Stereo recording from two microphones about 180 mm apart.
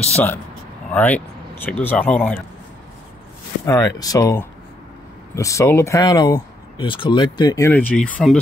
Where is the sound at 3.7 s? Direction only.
20° left (ahead or behind).